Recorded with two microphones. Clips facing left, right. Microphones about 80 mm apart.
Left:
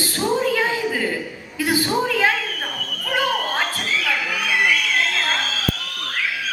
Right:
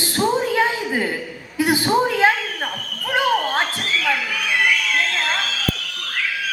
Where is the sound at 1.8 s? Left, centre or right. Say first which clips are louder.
Right 3 dB; right.